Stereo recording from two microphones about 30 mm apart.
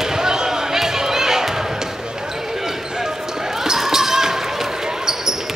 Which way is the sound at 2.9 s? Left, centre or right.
Centre.